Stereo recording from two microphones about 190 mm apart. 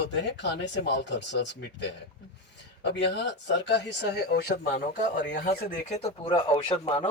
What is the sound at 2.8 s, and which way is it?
Speech, 65° left (ahead or behind).